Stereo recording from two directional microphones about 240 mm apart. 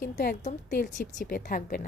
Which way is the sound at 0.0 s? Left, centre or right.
Left.